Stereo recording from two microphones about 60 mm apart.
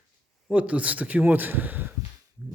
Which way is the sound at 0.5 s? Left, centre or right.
Right.